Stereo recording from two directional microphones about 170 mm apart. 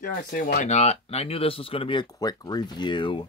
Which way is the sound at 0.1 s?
65° left (ahead or behind).